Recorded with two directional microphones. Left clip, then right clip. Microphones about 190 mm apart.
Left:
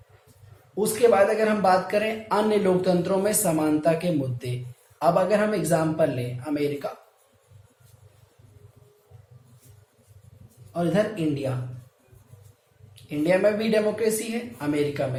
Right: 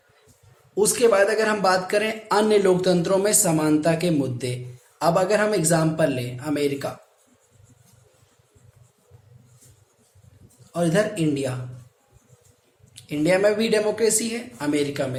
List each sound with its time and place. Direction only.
0.8 s a man's voice: 45° right (ahead or behind)
10.7 s a man's voice: 50° right (ahead or behind)
13.0 s a man's voice: 50° right (ahead or behind)